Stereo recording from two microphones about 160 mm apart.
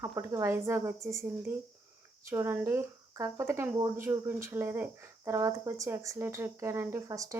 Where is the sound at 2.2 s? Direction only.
15° right (ahead or behind).